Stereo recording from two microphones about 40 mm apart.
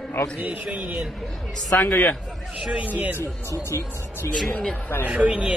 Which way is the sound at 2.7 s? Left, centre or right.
Right.